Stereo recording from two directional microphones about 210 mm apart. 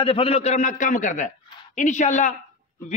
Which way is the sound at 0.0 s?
25° left (ahead or behind).